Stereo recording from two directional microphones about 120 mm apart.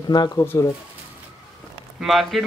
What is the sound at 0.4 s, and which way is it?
Speech, 25° left (ahead or behind).